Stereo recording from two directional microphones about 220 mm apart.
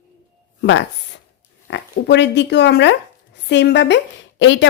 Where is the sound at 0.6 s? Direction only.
55° left (ahead or behind).